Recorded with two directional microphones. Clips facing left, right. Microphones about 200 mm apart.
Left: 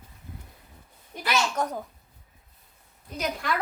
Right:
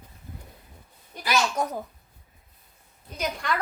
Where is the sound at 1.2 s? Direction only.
10° right (ahead or behind).